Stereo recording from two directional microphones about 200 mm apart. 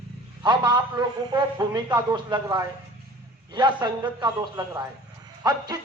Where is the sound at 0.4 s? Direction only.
20° right (ahead or behind).